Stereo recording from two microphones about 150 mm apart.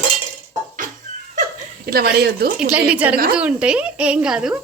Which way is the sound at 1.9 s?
85° right.